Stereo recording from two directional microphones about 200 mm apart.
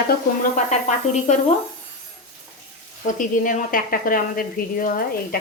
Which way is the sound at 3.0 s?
40° left (ahead or behind).